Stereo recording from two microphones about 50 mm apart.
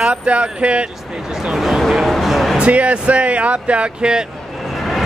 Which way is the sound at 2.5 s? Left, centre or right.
Right.